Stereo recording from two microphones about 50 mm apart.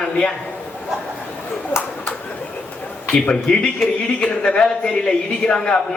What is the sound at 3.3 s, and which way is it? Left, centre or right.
A man's voice, centre.